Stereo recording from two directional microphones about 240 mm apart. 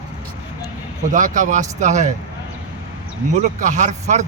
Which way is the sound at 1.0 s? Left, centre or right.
Right.